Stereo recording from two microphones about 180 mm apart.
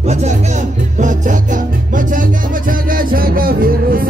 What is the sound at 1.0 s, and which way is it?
Music, 45° right (ahead or behind).